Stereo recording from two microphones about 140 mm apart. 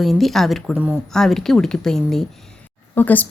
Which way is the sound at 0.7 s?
10° right (ahead or behind).